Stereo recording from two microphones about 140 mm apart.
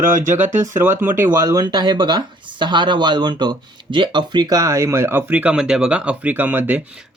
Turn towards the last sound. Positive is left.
turn(degrees=-10)  # may be behind; listen again after turning